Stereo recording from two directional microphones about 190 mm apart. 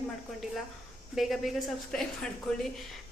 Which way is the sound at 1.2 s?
Centre (ahead or behind).